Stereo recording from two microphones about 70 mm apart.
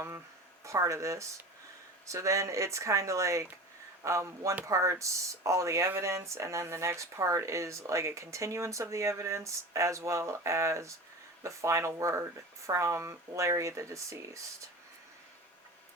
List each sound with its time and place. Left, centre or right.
0.6 s speech: right